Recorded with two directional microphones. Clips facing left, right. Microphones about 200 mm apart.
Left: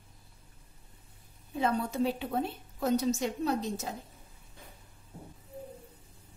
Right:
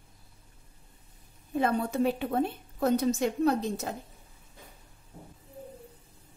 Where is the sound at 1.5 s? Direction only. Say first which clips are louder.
Right 3 dB; 55° right (ahead or behind).